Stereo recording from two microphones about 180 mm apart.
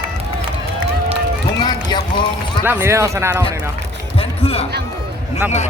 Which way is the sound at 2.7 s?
15° right (ahead or behind).